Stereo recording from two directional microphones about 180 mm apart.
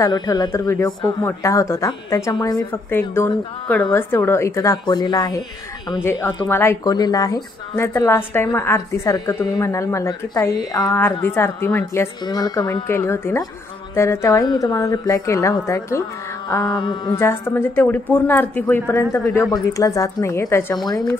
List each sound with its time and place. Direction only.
0.0 s a woman's voice: 20° left (ahead or behind)
6.4 s a woman's voice: 15° left (ahead or behind)
16.6 s speech: 25° left (ahead or behind)
17.1 s a woman's voice: 15° left (ahead or behind)